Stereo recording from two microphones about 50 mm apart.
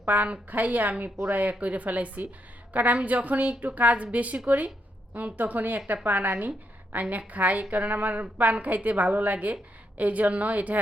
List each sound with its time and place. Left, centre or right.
0.0 s a woman's voice: right